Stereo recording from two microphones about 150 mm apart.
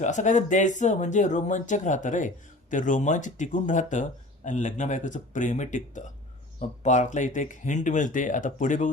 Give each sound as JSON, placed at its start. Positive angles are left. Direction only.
{"t": 0.0, "sound": "speech", "side_deg": 55}